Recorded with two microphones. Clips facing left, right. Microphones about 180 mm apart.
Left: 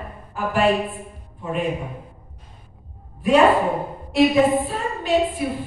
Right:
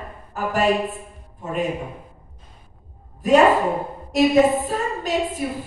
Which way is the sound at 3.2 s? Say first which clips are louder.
Even; 40° right (ahead or behind).